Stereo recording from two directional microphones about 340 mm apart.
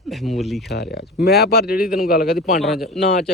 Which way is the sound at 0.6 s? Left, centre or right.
Left.